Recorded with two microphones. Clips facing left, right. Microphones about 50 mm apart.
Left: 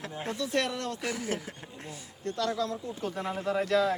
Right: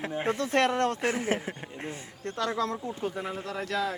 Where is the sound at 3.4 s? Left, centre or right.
Centre.